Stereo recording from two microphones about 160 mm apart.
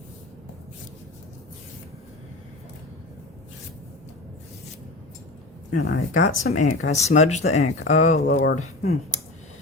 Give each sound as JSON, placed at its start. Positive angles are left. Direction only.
{"t": 5.7, "sound": "speech", "side_deg": 65}
{"t": 6.2, "sound": "speech", "side_deg": 50}